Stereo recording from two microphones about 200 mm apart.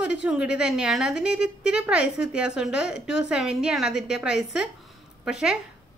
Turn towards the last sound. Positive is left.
turn(degrees=-5)  # may be behind; listen again after turning